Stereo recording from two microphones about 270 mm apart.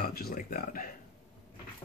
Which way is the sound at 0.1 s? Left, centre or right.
Left.